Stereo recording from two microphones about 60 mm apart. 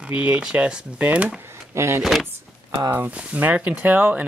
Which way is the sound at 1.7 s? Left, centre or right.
Right.